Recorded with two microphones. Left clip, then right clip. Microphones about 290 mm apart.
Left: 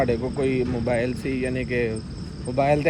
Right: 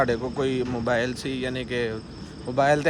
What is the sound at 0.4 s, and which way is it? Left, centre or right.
Speech, centre.